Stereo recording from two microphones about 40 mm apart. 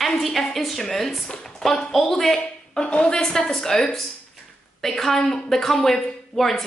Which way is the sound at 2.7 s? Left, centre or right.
Left.